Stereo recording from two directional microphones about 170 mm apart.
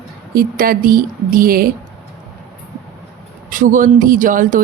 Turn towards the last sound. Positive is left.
turn(degrees=-50)  # may be behind; listen again after turning